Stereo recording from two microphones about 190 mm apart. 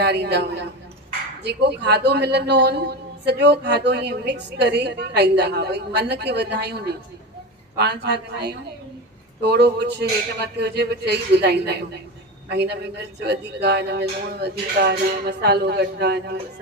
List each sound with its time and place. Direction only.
0.0 s a man's voice: 60° right (ahead or behind)